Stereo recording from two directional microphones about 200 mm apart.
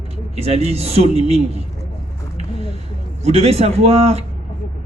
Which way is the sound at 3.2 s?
30° right (ahead or behind).